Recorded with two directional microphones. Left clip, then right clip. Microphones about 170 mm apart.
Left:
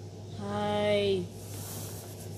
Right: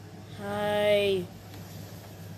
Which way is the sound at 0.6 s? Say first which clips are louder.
Right 3 dB; 40° right (ahead or behind).